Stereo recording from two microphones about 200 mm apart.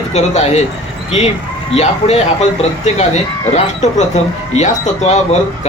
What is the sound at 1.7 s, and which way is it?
A man's voice, 30° left (ahead or behind).